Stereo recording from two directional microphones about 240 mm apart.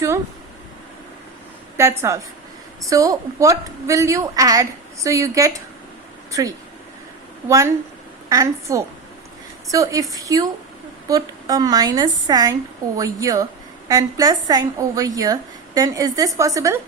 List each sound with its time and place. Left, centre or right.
1.7 s a woman's voice: centre
7.4 s a woman's voice: centre